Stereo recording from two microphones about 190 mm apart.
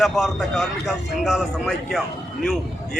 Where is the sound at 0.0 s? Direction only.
Centre (ahead or behind).